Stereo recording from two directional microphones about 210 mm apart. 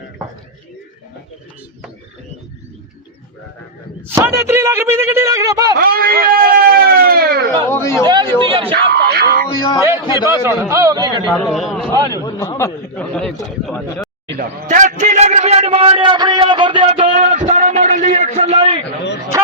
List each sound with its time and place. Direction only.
4.1 s speech: 10° right (ahead or behind)
5.7 s a sound: 45° right (ahead or behind)
7.7 s speech: 10° left (ahead or behind)
8.0 s a man's voice: 20° right (ahead or behind)
8.9 s speech: 50° right (ahead or behind)
10.0 s a man's voice: 20° left (ahead or behind)
10.4 s speech: 15° right (ahead or behind)
11.3 s a man's voice: centre (ahead or behind)
12.2 s speech: 15° left (ahead or behind)
14.3 s a sound: 40° right (ahead or behind)